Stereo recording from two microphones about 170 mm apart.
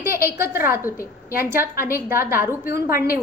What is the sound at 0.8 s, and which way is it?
Speech, 15° left (ahead or behind).